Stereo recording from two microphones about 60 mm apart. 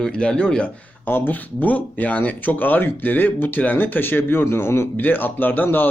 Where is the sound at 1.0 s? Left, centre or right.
Left.